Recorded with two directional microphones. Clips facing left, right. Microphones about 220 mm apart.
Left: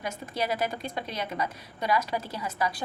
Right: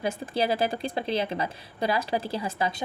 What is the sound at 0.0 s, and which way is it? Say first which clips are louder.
A woman's voice: right 5 dB; 30° right (ahead or behind).